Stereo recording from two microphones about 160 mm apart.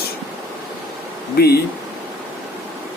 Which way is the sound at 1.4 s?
80° left.